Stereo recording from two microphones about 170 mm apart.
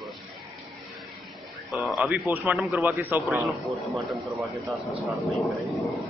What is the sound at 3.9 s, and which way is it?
A man's voice, centre (ahead or behind).